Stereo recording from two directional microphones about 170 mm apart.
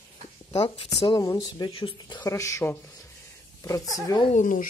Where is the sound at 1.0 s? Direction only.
25° left (ahead or behind).